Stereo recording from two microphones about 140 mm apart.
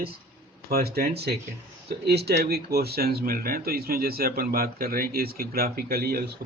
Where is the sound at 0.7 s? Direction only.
90° right.